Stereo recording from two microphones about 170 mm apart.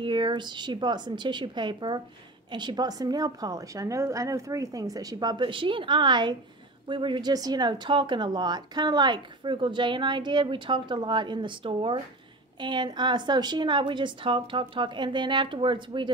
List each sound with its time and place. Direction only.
0.0 s speech: 25° right (ahead or behind)